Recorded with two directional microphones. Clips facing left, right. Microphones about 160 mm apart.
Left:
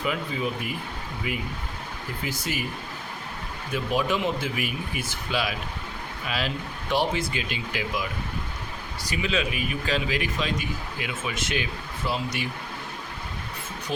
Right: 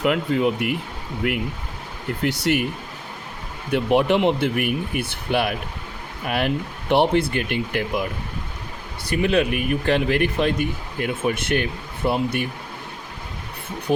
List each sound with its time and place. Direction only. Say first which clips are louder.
0.0 s speech: right 8 dB; 70° right (ahead or behind)
3.7 s speech: right 8 dB; 65° right (ahead or behind)
9.0 s speech: right 8 dB; 55° right (ahead or behind)